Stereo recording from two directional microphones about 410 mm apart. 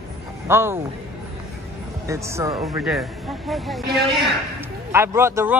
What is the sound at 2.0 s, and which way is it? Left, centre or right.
Speech, centre.